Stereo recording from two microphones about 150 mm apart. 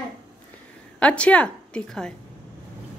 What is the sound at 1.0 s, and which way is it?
A woman's voice, 10° left (ahead or behind).